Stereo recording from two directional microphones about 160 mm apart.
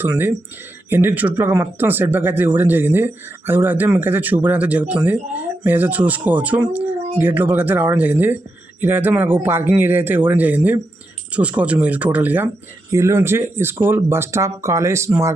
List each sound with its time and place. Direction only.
0.0 s speech: 15° right (ahead or behind)